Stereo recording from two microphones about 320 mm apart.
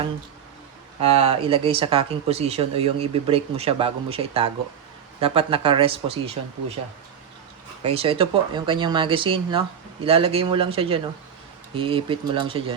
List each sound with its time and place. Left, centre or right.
1.2 s speech: centre
7.8 s speech: centre